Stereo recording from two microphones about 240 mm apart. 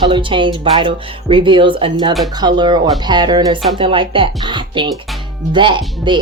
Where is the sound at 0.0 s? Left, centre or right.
Right.